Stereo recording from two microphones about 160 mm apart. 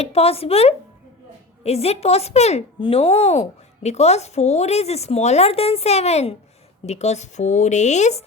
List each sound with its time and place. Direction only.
0.0 s speech: 40° left (ahead or behind)